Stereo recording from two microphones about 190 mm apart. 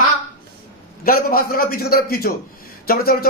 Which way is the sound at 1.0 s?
50° left (ahead or behind).